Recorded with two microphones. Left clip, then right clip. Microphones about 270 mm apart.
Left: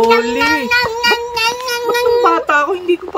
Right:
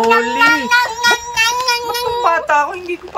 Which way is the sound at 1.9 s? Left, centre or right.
Centre.